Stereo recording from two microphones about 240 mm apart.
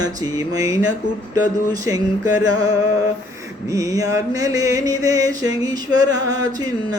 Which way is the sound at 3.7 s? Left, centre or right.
Centre.